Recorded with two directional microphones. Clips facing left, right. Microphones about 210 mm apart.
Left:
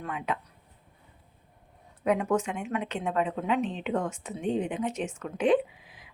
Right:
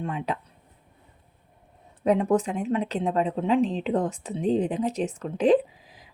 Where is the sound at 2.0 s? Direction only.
35° right (ahead or behind).